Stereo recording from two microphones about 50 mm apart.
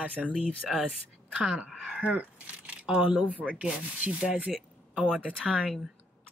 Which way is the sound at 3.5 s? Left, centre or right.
Right.